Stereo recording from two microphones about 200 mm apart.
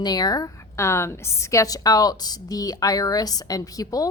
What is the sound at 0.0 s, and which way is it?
A woman's voice, 20° left (ahead or behind).